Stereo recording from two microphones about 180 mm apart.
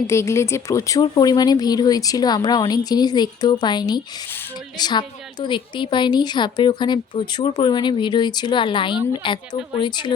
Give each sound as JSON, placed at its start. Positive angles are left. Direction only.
{"t": 0.1, "sound": "a woman's voice", "side_deg": 15}